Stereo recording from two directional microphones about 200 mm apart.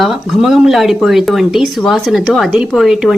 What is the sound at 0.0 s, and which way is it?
Speech, centre (ahead or behind).